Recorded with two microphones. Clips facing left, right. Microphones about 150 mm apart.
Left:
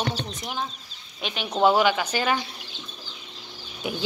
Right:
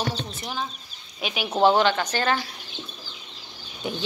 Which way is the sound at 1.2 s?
5° right (ahead or behind).